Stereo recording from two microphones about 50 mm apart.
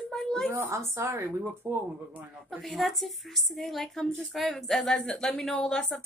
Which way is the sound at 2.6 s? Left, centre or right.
Centre.